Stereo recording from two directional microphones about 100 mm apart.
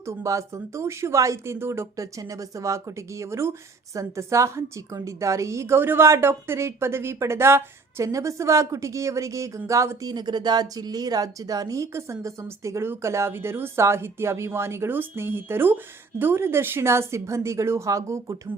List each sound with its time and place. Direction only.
0.0 s speech: 30° right (ahead or behind)
10.1 s speech: 45° right (ahead or behind)